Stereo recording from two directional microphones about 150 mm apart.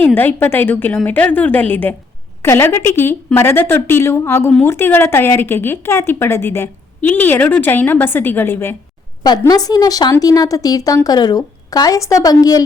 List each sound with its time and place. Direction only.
0.0 s speech: 15° left (ahead or behind)
9.4 s speech: 25° left (ahead or behind)